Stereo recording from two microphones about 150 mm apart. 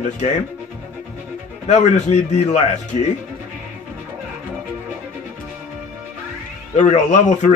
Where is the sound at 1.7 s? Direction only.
50° left (ahead or behind).